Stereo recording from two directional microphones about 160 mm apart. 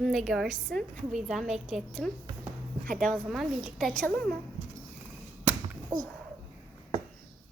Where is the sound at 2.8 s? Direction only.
55° right (ahead or behind).